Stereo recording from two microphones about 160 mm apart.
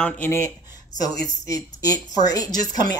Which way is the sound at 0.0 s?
15° left (ahead or behind).